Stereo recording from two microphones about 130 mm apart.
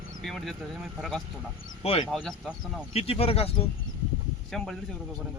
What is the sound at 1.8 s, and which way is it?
Speech, 45° left (ahead or behind).